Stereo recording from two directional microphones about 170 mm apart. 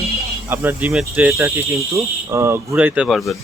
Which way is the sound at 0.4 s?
15° right (ahead or behind).